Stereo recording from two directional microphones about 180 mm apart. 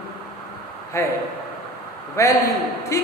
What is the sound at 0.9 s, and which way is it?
A man's voice, 15° left (ahead or behind).